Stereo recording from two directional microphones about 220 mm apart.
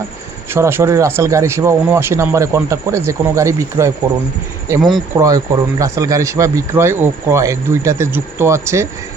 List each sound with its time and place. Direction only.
0.5 s speech: 10° right (ahead or behind)